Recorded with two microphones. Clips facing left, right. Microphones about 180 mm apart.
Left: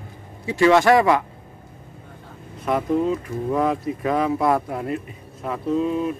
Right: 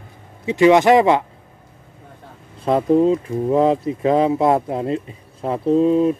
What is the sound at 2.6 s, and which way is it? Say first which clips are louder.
Speech: right 6 dB; 30° right (ahead or behind).